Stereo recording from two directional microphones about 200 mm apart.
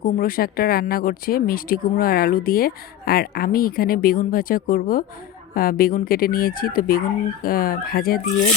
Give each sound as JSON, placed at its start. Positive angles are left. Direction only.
{"t": 0.0, "sound": "speech", "side_deg": 45}